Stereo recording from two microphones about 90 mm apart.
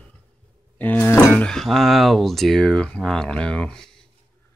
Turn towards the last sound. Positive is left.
turn(degrees=10)  # may be behind; listen again after turning